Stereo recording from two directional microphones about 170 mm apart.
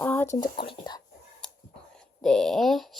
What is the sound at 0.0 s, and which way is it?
Whispering, 10° left (ahead or behind).